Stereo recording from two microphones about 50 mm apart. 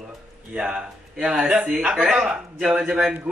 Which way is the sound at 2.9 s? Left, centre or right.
Centre.